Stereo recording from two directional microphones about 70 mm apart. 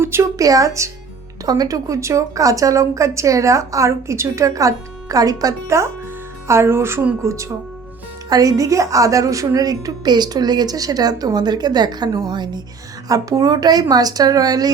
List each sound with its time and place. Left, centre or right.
0.0 s a sound: right
0.3 s a woman's voice: right
1.5 s a woman's voice: right
5.6 s a woman's voice: right
8.3 s a woman's voice: right
13.1 s a woman's voice: right